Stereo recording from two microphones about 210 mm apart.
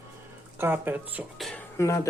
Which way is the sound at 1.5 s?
15° left (ahead or behind).